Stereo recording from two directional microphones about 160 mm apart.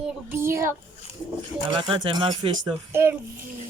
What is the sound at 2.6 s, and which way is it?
Speech, 15° right (ahead or behind).